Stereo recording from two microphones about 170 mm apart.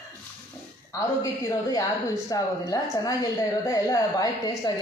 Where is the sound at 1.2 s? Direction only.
20° left (ahead or behind).